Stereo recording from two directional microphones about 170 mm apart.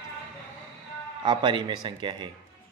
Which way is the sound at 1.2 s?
25° right (ahead or behind).